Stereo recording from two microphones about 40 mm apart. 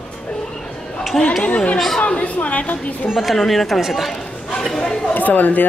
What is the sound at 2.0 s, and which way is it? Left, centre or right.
Speech, left.